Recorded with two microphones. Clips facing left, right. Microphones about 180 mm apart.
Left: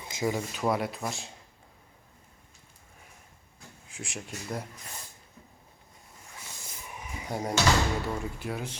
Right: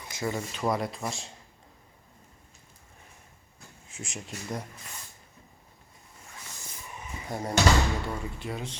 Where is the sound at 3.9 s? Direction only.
Centre (ahead or behind).